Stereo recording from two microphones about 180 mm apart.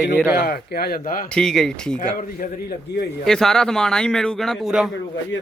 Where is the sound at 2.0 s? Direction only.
55° left (ahead or behind).